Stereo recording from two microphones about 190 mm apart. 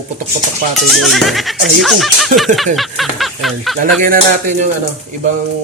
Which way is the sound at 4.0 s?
45° right (ahead or behind).